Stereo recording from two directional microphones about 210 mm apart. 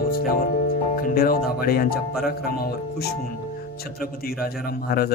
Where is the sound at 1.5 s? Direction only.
45° left (ahead or behind).